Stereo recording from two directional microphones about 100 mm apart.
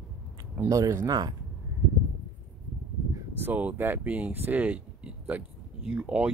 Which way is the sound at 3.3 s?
20° right (ahead or behind).